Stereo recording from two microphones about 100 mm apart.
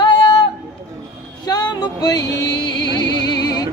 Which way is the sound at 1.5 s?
40° left (ahead or behind).